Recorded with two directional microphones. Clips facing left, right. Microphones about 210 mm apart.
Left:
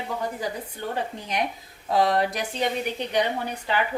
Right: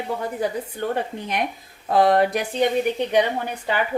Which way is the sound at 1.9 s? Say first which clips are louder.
Right 5 dB; 55° right (ahead or behind).